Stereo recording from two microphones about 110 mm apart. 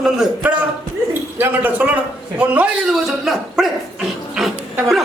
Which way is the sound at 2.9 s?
5° right (ahead or behind).